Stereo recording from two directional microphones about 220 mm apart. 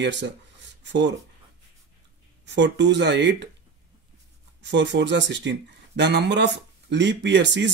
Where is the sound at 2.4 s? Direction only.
55° right (ahead or behind).